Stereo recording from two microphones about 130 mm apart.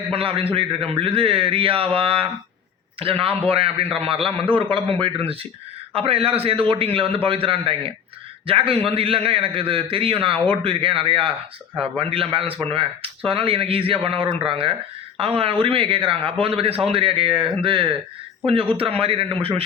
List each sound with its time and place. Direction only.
0.1 s a man's voice: 45° right (ahead or behind)